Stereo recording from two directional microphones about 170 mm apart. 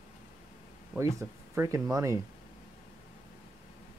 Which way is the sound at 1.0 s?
15° right (ahead or behind).